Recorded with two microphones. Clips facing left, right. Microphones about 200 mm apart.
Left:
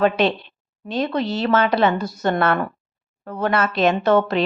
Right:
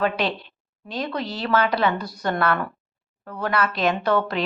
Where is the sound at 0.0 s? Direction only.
25° left (ahead or behind).